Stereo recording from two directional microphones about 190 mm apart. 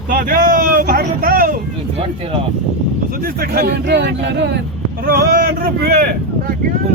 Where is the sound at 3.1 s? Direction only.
50° right (ahead or behind).